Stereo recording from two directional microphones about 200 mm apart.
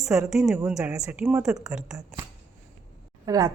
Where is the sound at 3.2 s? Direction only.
20° right (ahead or behind).